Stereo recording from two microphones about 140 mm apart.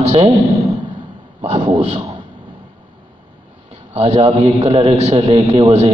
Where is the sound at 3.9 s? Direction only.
45° right (ahead or behind).